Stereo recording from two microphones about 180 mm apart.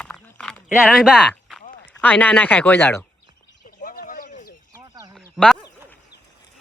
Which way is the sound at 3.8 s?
50° left (ahead or behind).